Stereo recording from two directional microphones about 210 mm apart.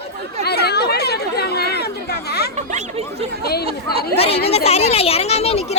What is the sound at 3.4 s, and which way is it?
Speech, 50° left (ahead or behind).